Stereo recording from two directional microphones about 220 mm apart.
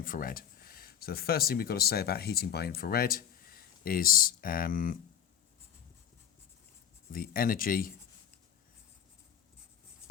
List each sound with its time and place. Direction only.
0.0 s speech: 40° left (ahead or behind)
7.1 s speech: 40° left (ahead or behind)